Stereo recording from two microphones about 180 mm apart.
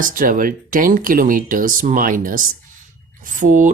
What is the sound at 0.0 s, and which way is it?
Speech, 50° right (ahead or behind).